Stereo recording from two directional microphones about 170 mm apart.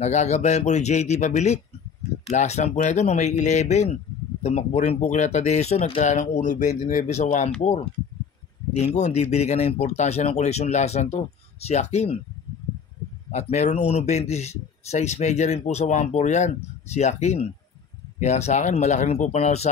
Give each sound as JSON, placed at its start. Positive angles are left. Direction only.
{"t": 0.0, "sound": "speech", "side_deg": 40}
{"t": 8.7, "sound": "a man's voice", "side_deg": 40}
{"t": 13.3, "sound": "a man's voice", "side_deg": 40}